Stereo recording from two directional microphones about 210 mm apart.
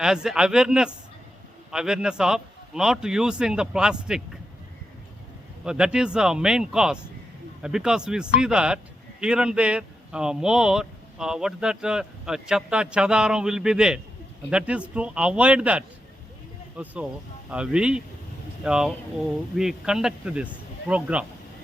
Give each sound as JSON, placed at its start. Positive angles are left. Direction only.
{"t": 0.0, "sound": "speech", "side_deg": -5}
{"t": 5.6, "sound": "speech", "side_deg": -5}